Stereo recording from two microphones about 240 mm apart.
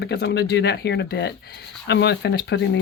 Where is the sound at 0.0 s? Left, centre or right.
Left.